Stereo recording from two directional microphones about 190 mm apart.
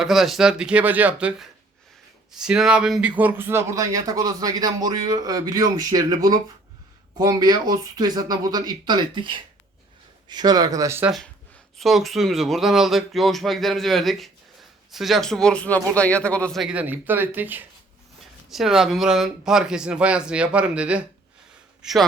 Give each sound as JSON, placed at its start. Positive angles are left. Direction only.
{"t": 0.0, "sound": "speech", "side_deg": 0}
{"t": 2.5, "sound": "speech", "side_deg": -5}
{"t": 11.8, "sound": "speech", "side_deg": 0}
{"t": 21.8, "sound": "a sound", "side_deg": 0}